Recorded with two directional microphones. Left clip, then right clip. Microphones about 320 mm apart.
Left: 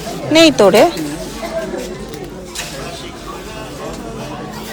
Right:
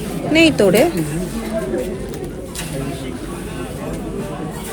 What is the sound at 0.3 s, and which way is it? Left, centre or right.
Speech, centre.